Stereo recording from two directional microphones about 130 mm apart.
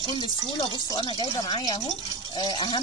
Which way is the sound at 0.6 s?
25° left (ahead or behind).